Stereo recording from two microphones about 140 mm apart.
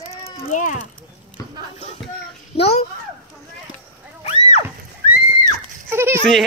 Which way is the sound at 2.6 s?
45° left (ahead or behind).